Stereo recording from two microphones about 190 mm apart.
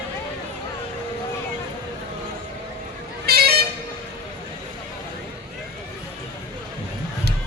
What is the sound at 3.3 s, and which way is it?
Vehicle, 55° right (ahead or behind).